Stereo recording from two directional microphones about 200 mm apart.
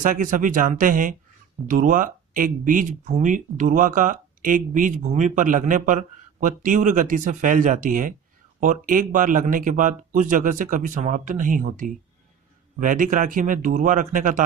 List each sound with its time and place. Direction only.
0.0 s speech: 40° right (ahead or behind)